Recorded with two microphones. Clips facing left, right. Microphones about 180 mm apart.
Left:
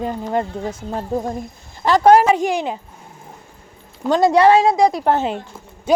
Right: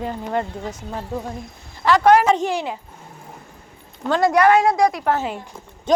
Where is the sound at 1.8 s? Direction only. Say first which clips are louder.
Left 2 dB; 35° left (ahead or behind).